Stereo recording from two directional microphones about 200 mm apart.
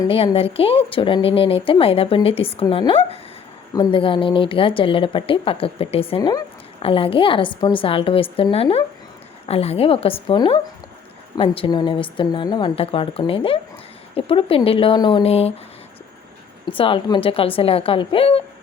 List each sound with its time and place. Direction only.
0.0 s a woman's voice: 25° left (ahead or behind)
16.6 s a woman's voice: 25° left (ahead or behind)